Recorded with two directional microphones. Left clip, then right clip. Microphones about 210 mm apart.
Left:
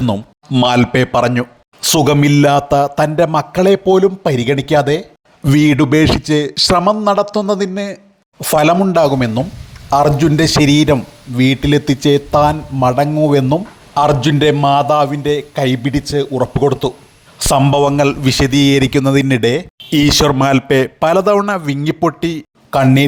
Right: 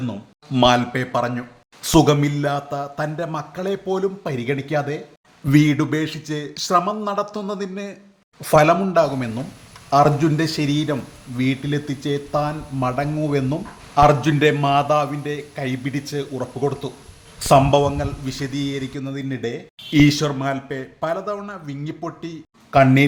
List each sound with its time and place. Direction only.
0.6 s a man's voice: 40° left (ahead or behind)